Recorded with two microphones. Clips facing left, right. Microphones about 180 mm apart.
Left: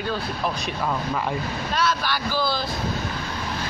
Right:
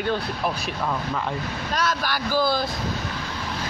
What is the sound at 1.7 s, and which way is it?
Speech, 45° right (ahead or behind).